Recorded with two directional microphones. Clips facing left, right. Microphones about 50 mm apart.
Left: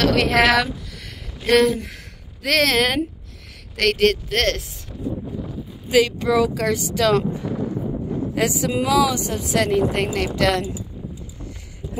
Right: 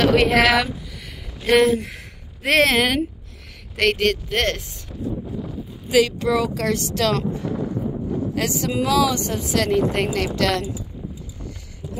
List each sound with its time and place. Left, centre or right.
0.0 s speech: centre
2.4 s speech: right
4.0 s speech: centre
5.5 s speech: centre